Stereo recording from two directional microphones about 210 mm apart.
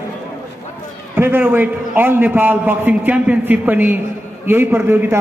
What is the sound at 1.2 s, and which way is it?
A man's voice, 10° right (ahead or behind).